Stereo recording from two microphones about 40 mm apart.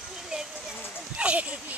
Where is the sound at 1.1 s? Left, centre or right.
Right.